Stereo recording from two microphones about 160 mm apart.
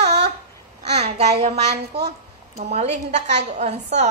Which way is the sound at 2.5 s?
45° right (ahead or behind).